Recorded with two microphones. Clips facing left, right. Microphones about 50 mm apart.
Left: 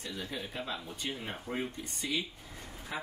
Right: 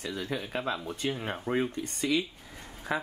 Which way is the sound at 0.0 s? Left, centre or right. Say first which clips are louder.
Right 5 dB; right.